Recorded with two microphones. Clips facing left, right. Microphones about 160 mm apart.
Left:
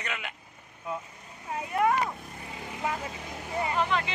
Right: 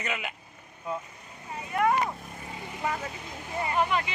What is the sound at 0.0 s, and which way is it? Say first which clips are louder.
Speech: right 3 dB; 5° right (ahead or behind).